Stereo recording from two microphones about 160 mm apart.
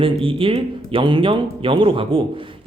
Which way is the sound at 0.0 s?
35° right (ahead or behind).